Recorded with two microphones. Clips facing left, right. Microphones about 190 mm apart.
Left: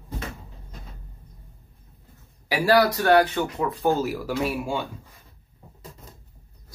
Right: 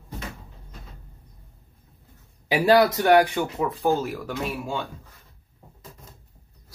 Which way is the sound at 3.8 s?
Centre (ahead or behind).